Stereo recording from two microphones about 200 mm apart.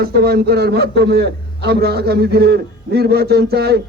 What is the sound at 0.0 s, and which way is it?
A man's voice, 50° right (ahead or behind).